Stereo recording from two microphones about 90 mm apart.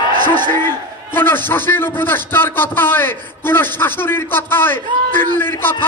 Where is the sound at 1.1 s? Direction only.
25° left (ahead or behind).